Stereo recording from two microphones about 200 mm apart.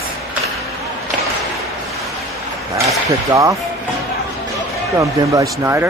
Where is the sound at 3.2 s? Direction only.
15° right (ahead or behind).